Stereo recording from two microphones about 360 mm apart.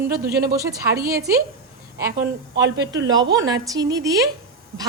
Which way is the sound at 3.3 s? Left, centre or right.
Centre.